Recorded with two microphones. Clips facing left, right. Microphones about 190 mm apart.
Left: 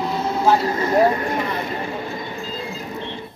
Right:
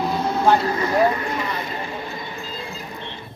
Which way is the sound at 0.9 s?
30° left (ahead or behind).